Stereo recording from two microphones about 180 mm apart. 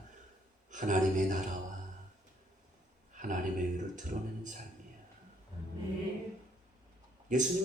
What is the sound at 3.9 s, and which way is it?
Speech, 45° right (ahead or behind).